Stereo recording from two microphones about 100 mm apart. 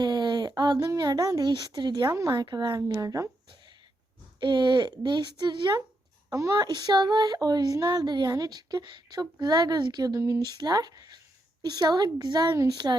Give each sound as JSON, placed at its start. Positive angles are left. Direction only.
{"t": 0.0, "sound": "a sound", "side_deg": -45}
{"t": 0.9, "sound": "speech", "side_deg": -40}
{"t": 2.0, "sound": "speech", "side_deg": -35}
{"t": 4.4, "sound": "speech", "side_deg": -50}
{"t": 6.3, "sound": "speech", "side_deg": -40}
{"t": 10.4, "sound": "speech", "side_deg": -45}